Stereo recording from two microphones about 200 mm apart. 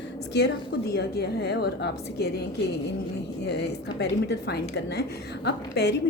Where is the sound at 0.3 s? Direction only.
55° left (ahead or behind).